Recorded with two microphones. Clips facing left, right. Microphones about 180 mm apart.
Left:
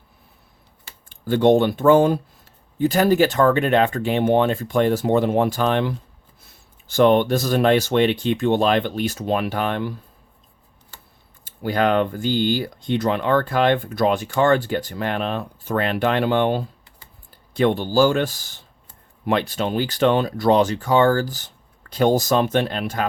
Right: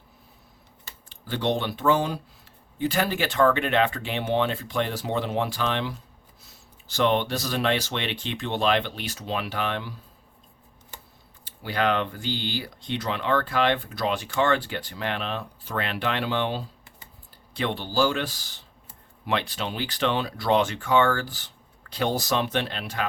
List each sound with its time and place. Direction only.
1.1 s speech: 50° left (ahead or behind)
11.4 s speech: 45° left (ahead or behind)